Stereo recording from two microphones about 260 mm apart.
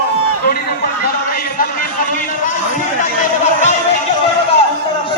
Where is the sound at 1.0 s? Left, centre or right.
Left.